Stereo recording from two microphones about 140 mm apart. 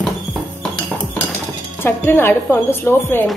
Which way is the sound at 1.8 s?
15° left (ahead or behind).